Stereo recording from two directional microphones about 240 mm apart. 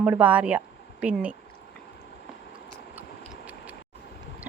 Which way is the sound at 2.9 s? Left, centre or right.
Centre.